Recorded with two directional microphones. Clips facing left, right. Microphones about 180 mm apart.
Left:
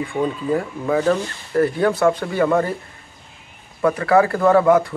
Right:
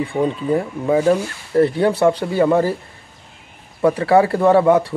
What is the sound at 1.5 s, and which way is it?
Speech, 25° right (ahead or behind).